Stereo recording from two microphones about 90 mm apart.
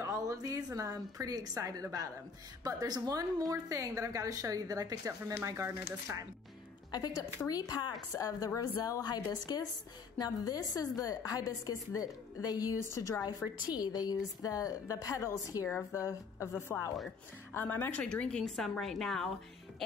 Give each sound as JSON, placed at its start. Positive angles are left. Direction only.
{"t": 0.0, "sound": "a woman's voice", "side_deg": -35}
{"t": 6.9, "sound": "a woman's voice", "side_deg": 45}
{"t": 8.1, "sound": "a woman's voice", "side_deg": 35}
{"t": 12.8, "sound": "a woman's voice", "side_deg": 30}
{"t": 13.4, "sound": "a woman's voice", "side_deg": 10}
{"t": 13.7, "sound": "a woman's voice", "side_deg": 45}
{"t": 18.0, "sound": "a woman's voice", "side_deg": 10}